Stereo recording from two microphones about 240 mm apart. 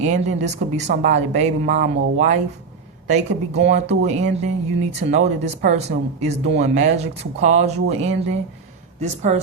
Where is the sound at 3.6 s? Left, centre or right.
Right.